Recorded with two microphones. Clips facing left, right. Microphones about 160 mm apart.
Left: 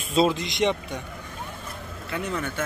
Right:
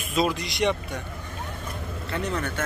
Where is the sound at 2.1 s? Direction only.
10° left (ahead or behind).